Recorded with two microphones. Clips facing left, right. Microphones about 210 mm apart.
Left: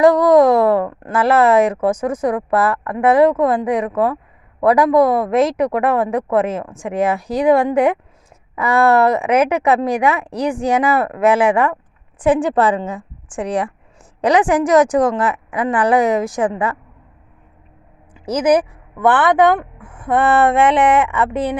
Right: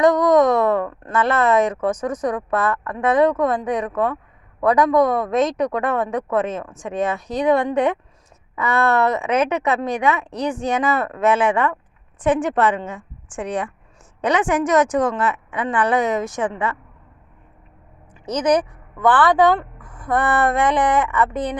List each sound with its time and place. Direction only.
0.0 s a woman's voice: 30° left (ahead or behind)
10.3 s speech: 10° left (ahead or behind)
10.8 s a woman's voice: 35° left (ahead or behind)
11.0 s speech: 10° left (ahead or behind)
11.3 s a woman's voice: 30° left (ahead or behind)
18.5 s speech: 25° left (ahead or behind)